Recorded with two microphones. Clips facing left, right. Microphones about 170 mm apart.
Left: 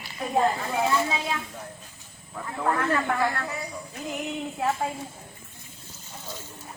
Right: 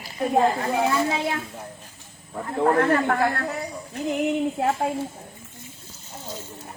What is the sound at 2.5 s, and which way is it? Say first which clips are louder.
Speech: right 6 dB; 50° right (ahead or behind).